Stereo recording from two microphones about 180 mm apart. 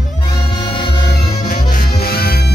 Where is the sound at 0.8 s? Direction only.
65° left (ahead or behind).